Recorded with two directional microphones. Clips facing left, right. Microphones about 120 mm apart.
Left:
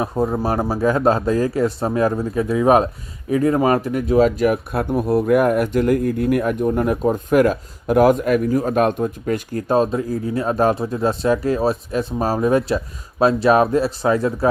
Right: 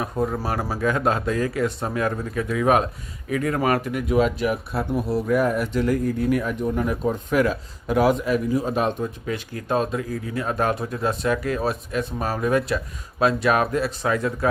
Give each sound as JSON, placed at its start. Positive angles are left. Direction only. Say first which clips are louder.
{"t": 0.0, "sound": "speech", "louder": "left 5 dB", "side_deg": 30}
{"t": 4.7, "sound": "speech", "louder": "left 5 dB", "side_deg": 50}